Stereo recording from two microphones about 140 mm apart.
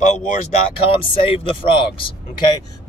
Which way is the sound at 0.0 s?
60° left (ahead or behind).